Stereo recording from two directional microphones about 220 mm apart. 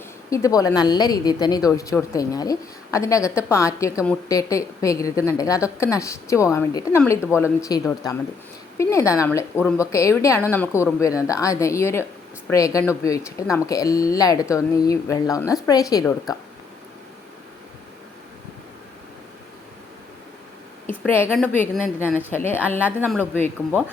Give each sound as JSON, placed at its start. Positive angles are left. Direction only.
{"t": 0.3, "sound": "a woman's voice", "side_deg": 15}
{"t": 20.8, "sound": "a woman's voice", "side_deg": 10}
{"t": 23.0, "sound": "a man's voice", "side_deg": 0}